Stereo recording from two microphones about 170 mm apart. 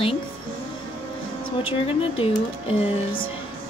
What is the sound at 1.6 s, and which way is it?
Speech, 35° left (ahead or behind).